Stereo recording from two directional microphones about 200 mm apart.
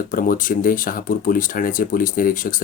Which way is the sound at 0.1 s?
45° left (ahead or behind).